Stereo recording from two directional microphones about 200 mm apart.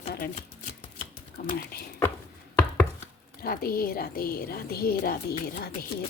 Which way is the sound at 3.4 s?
50° left (ahead or behind).